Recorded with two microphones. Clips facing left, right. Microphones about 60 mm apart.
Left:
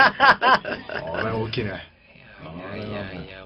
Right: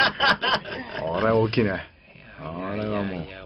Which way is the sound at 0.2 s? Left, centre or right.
Left.